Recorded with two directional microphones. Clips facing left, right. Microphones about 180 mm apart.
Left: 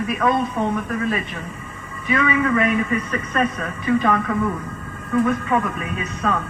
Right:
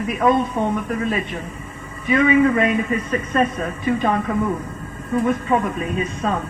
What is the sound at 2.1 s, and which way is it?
A man's voice, 30° right (ahead or behind).